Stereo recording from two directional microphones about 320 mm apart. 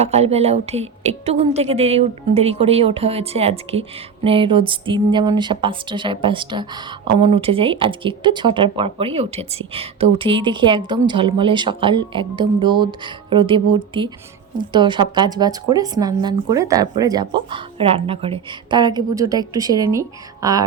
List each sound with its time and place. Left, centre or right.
0.0 s a woman's voice: centre